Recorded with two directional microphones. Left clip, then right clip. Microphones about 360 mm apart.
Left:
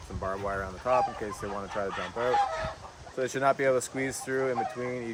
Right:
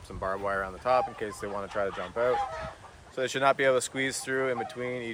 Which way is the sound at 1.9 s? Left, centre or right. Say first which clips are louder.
Left 2 dB; left.